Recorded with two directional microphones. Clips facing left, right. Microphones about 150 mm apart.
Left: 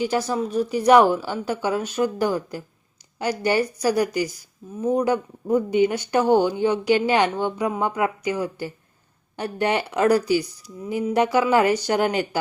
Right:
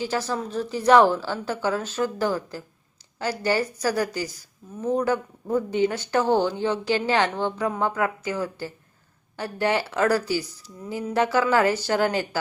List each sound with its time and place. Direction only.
0.0 s a woman's voice: 15° left (ahead or behind)